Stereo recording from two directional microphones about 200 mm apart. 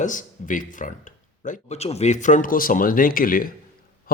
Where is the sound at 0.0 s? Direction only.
40° left (ahead or behind).